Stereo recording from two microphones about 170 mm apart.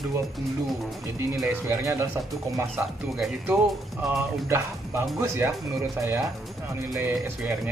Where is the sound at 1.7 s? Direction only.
15° right (ahead or behind).